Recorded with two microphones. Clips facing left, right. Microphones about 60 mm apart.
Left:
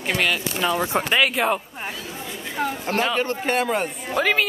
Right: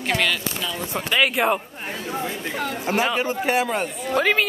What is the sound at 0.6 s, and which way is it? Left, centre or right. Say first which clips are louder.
Speech: left 7 dB; left.